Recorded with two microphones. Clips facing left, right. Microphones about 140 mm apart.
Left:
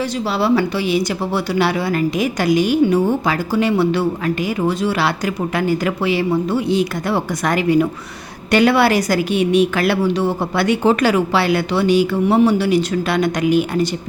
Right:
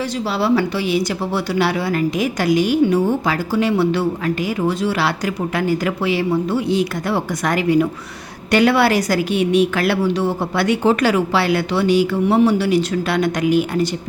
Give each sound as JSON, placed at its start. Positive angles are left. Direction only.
{"t": 0.0, "sound": "speech", "side_deg": 20}